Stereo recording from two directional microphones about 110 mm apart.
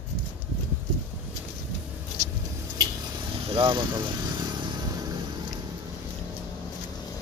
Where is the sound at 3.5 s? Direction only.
50° right (ahead or behind).